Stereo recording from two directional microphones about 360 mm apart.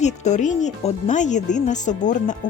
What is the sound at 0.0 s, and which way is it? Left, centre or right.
Speech, centre.